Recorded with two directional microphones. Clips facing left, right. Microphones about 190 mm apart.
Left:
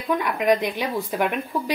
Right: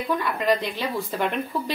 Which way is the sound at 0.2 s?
15° left (ahead or behind).